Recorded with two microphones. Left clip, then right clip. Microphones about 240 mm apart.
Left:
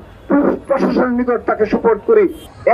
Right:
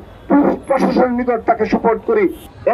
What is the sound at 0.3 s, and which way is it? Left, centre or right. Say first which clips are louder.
A man's voice: right 1 dB; right.